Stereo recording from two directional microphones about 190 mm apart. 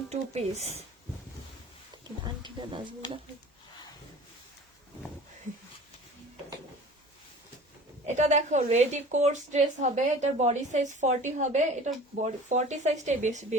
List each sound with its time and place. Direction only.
0.1 s a woman's voice: 35° right (ahead or behind)
2.2 s a sound: 25° right (ahead or behind)
8.0 s a woman's voice: 35° right (ahead or behind)